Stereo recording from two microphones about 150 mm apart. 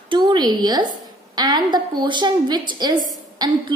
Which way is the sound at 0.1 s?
30° right (ahead or behind).